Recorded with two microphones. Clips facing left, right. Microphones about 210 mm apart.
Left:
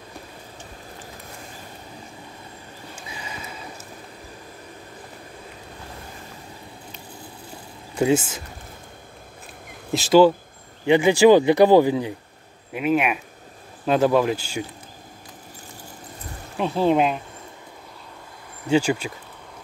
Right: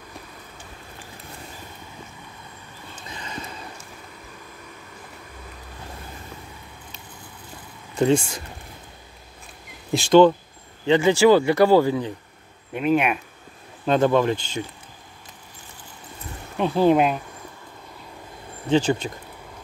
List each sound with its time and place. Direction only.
3.0 s a sound: 10° left (ahead or behind)
8.0 s speech: 5° left (ahead or behind)
9.9 s speech: 5° left (ahead or behind)
12.7 s speech: 5° left (ahead or behind)
16.5 s speech: centre (ahead or behind)
18.7 s speech: 10° left (ahead or behind)